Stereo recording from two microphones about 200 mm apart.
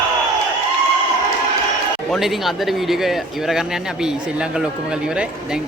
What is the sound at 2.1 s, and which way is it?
Speech, centre (ahead or behind).